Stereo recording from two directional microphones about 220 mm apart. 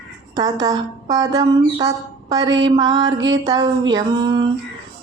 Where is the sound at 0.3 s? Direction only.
15° right (ahead or behind).